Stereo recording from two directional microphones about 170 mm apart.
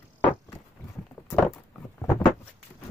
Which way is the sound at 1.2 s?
15° left (ahead or behind).